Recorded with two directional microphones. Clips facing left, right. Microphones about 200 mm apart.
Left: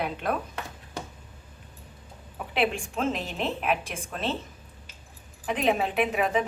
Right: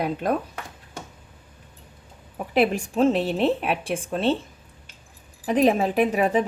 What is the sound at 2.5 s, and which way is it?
A woman's voice, 40° right (ahead or behind).